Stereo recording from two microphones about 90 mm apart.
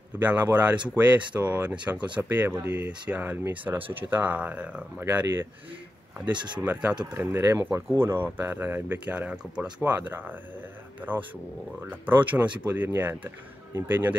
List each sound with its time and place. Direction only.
0.2 s speech: 20° right (ahead or behind)
6.3 s speech: 55° right (ahead or behind)
6.6 s speech: 15° right (ahead or behind)